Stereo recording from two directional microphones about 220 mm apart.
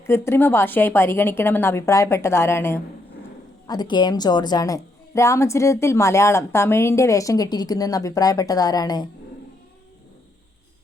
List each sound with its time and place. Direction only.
0.0 s a woman's voice: 10° left (ahead or behind)